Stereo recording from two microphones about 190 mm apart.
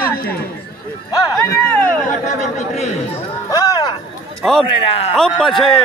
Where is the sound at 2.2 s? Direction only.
35° left (ahead or behind).